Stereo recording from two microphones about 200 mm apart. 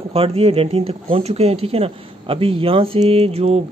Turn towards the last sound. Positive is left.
turn(degrees=-30)  # may be behind; listen again after turning